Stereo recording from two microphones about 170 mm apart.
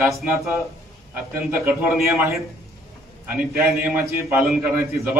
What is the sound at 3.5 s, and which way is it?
A man's voice, 15° right (ahead or behind).